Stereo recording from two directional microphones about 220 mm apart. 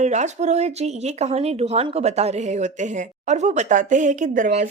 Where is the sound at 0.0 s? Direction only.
30° right (ahead or behind).